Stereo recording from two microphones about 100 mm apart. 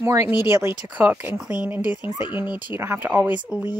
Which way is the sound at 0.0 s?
25° right (ahead or behind).